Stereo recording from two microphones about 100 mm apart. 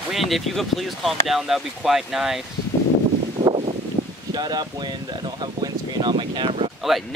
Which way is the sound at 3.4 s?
75° right (ahead or behind).